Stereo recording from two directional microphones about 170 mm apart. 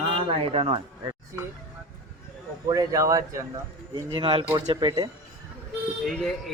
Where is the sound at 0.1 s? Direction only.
35° right (ahead or behind).